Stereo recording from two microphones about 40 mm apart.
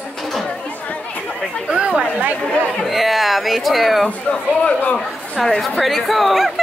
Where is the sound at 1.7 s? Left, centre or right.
Right.